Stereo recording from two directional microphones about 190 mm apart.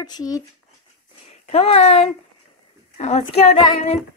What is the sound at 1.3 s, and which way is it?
A woman's voice, 35° left (ahead or behind).